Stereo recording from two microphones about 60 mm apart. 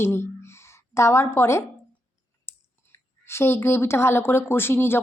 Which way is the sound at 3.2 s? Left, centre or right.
Left.